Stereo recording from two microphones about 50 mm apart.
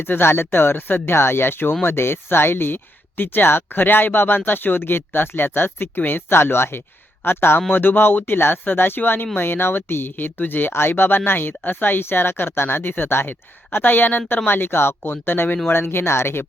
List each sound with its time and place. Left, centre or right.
0.0 s speech: left